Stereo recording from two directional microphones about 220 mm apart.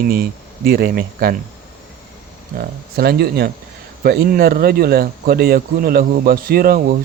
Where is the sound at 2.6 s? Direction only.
45° right (ahead or behind).